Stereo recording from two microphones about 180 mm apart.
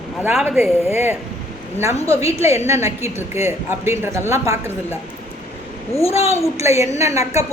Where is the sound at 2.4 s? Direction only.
15° right (ahead or behind).